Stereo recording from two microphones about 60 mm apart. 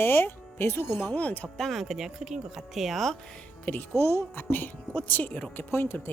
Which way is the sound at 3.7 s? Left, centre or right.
Left.